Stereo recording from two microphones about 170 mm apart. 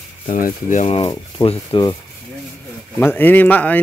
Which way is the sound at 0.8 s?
35° left (ahead or behind).